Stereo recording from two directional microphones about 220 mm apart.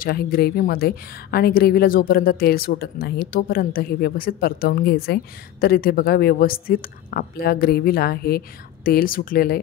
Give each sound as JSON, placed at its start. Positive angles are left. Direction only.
{"t": 0.0, "sound": "a woman's voice", "side_deg": 45}